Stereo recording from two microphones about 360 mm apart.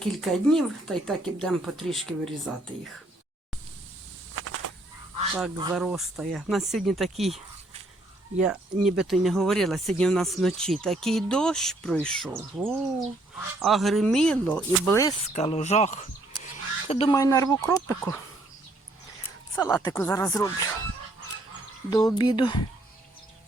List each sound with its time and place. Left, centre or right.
0.0 s speech: centre
4.4 s a sound: right
5.7 s speech: centre
15.3 s speech: centre
19.5 s speech: centre
21.8 s speech: centre